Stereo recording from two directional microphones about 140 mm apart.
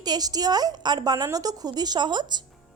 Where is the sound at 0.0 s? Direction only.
30° right (ahead or behind).